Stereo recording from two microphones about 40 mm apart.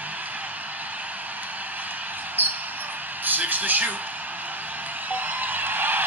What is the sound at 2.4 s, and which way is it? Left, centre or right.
Basketball bounce, right.